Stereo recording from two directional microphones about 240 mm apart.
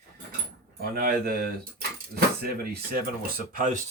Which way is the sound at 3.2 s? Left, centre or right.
Right.